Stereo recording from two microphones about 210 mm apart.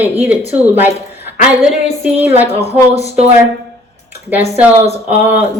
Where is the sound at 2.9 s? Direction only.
30° right (ahead or behind).